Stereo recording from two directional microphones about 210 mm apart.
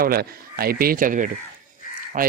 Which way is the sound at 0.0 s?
45° right (ahead or behind).